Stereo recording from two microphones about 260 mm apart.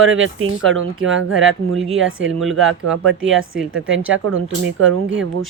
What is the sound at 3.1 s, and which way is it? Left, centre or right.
Speech, right.